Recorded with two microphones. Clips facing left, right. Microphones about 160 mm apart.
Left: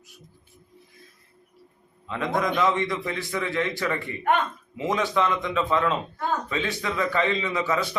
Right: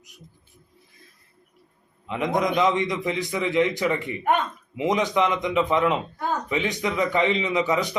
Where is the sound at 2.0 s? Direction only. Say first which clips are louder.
Right 2 dB; 20° right (ahead or behind).